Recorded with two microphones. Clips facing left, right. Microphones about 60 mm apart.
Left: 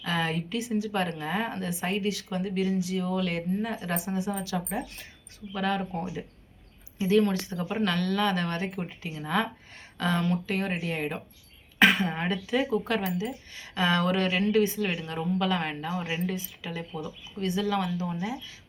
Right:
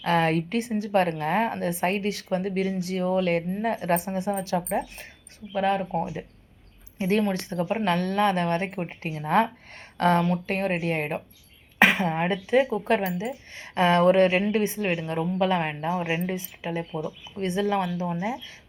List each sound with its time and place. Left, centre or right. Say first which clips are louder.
0.0 s a woman's voice: right 7 dB; right
7.2 s a woman's voice: even; right
11.8 s speech: right 2 dB; right
12.1 s a woman's voice: right 6 dB; right